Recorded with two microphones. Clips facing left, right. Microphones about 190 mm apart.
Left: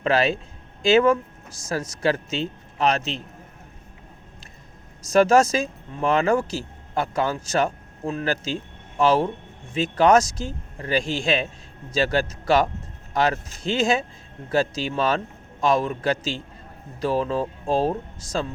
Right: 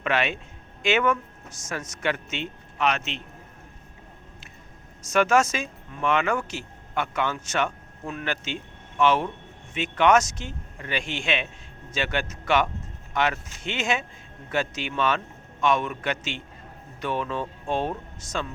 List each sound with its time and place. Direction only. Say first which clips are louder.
0.0 s speech: left 5 dB; 35° left (ahead or behind)
5.0 s speech: left 5 dB; 35° left (ahead or behind)